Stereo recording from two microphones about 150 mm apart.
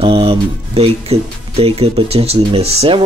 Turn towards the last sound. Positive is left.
turn(degrees=-40)  # may be behind; listen again after turning